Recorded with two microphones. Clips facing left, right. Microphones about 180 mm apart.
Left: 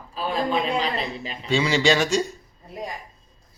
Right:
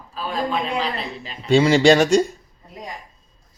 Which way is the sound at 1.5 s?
50° right (ahead or behind).